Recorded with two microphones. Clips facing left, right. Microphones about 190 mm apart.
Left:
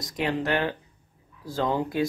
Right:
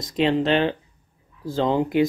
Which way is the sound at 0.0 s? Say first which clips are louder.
Right 7 dB; 25° right (ahead or behind).